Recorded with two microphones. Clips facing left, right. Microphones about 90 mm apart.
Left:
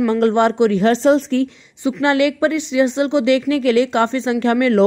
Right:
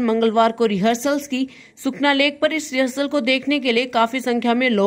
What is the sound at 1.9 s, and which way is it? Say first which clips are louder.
Speech: left 2 dB; 25° left (ahead or behind).